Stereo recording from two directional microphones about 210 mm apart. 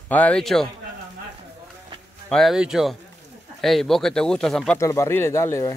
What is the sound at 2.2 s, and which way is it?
A man's voice, centre (ahead or behind).